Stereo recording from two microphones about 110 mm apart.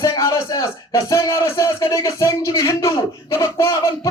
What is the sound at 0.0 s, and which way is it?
A man's voice, 30° left (ahead or behind).